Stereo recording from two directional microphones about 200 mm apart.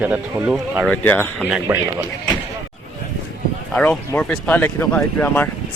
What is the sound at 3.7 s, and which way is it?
Speech, 5° left (ahead or behind).